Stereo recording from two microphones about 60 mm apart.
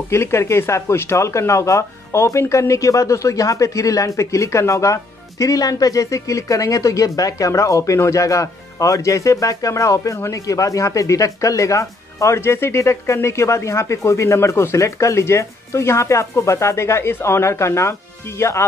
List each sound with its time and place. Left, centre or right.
0.1 s speech: left